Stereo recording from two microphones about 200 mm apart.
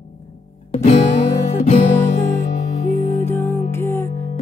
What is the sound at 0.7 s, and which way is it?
Music, 35° left (ahead or behind).